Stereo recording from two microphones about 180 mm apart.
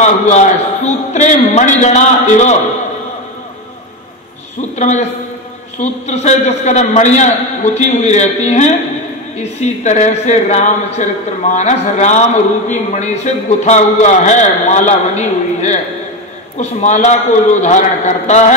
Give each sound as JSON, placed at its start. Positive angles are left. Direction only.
{"t": 0.0, "sound": "a man's voice", "side_deg": 40}
{"t": 4.6, "sound": "a man's voice", "side_deg": 40}